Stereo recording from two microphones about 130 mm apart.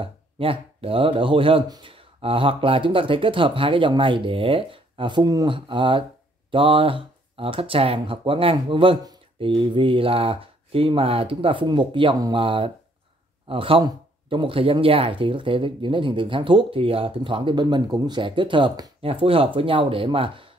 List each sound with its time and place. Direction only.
0.0 s speech: 45° right (ahead or behind)